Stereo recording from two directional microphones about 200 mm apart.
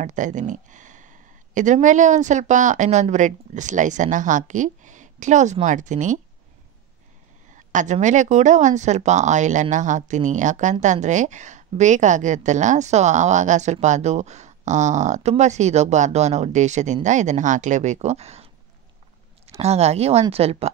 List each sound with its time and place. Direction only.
0.0 s speech: 40° right (ahead or behind)
7.5 s speech: 40° right (ahead or behind)
19.6 s speech: 30° right (ahead or behind)